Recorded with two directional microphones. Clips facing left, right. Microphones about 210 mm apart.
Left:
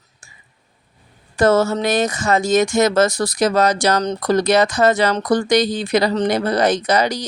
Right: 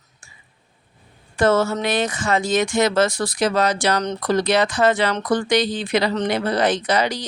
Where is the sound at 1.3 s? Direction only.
40° left (ahead or behind).